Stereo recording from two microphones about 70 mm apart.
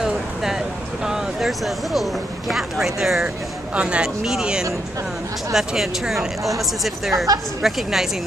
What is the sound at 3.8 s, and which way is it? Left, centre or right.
Speech, centre.